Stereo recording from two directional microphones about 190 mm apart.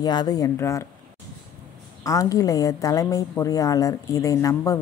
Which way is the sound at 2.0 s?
15° left (ahead or behind).